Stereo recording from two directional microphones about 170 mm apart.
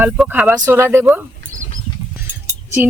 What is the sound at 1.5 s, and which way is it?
Patter, 20° right (ahead or behind).